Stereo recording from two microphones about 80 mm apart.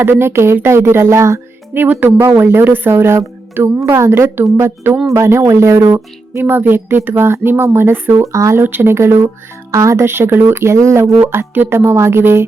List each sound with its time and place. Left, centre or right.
0.0 s speech: right
1.8 s speech: right
2.1 s speech: right
6.4 s speech: right
8.1 s speech: right
8.6 s speech: right